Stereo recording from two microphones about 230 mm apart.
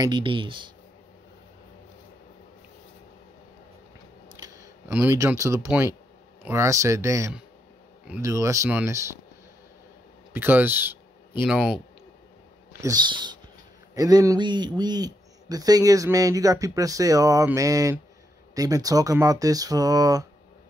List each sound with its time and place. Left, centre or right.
0.0 s speech: right
4.4 s speech: centre
10.3 s speech: centre
12.8 s speech: centre